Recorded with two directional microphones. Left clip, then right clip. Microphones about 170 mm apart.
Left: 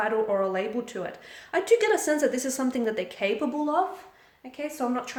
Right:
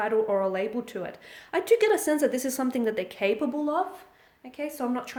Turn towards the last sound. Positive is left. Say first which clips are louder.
# left 1 dB
turn(degrees=-50)  # may be behind; listen again after turning